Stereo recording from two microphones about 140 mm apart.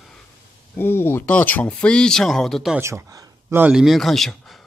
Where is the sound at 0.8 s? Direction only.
15° left (ahead or behind).